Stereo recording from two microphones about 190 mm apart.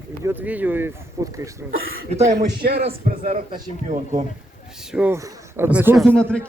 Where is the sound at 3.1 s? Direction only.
45° right (ahead or behind).